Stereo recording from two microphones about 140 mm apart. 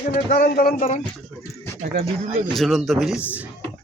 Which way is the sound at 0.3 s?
90° left.